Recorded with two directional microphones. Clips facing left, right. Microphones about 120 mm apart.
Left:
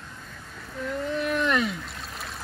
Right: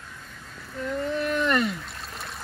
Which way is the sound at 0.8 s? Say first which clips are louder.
Right 1 dB; centre (ahead or behind).